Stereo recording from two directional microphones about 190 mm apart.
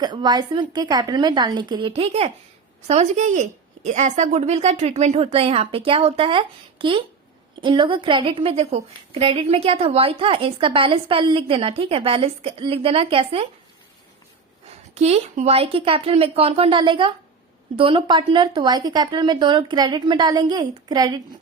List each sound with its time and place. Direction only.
0.0 s a woman's voice: 20° right (ahead or behind)
14.9 s a woman's voice: 35° right (ahead or behind)